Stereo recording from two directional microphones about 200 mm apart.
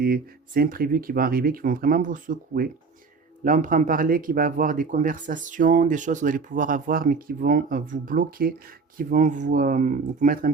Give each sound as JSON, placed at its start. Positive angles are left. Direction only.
{"t": 0.0, "sound": "speech", "side_deg": -50}